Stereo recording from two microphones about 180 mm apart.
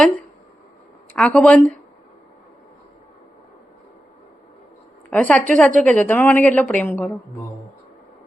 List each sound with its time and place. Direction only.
1.1 s a woman's voice: 5° left (ahead or behind)
5.1 s a woman's voice: 10° left (ahead or behind)